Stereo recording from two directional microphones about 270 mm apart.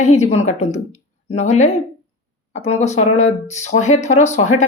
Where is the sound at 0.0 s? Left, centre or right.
Left.